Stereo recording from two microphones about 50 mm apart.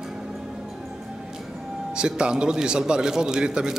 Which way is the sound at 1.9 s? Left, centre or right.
Centre.